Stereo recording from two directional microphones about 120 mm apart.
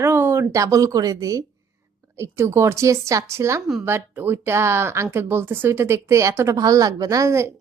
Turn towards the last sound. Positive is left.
turn(degrees=-25)  # may be behind; listen again after turning